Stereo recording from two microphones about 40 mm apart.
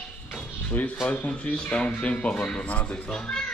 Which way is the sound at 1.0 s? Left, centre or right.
Left.